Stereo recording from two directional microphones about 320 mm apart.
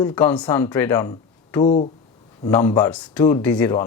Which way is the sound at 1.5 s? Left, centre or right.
Centre.